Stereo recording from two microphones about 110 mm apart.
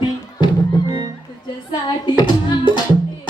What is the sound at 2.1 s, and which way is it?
Music, 40° left (ahead or behind).